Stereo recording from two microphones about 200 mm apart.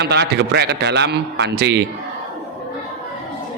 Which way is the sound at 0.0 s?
55° right (ahead or behind).